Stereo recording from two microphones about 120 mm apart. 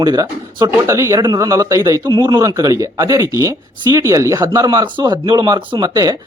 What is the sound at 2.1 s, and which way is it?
Speech, 40° right (ahead or behind).